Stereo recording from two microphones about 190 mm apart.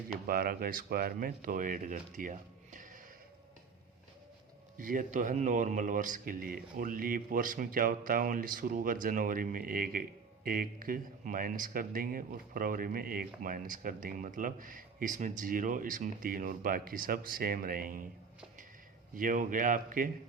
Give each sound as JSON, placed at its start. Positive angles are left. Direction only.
{"t": 0.3, "sound": "speech", "side_deg": -50}
{"t": 4.8, "sound": "speech", "side_deg": -45}
{"t": 19.1, "sound": "speech", "side_deg": -45}